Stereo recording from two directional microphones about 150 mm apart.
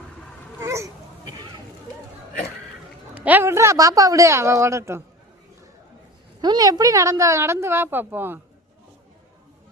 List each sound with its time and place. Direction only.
0.6 s a sound: 20° right (ahead or behind)
3.2 s a woman's voice: 10° right (ahead or behind)
6.4 s a woman's voice: 25° right (ahead or behind)